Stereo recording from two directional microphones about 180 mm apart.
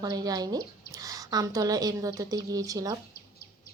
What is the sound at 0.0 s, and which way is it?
Speech, 20° right (ahead or behind).